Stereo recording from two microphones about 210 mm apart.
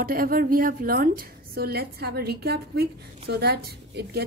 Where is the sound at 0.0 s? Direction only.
45° right (ahead or behind).